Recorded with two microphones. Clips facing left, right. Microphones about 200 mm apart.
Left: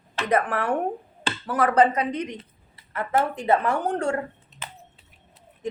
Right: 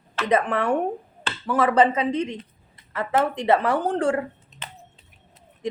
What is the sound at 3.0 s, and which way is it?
Speech, 90° right.